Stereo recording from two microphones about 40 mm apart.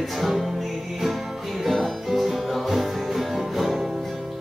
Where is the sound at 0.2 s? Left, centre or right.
Centre.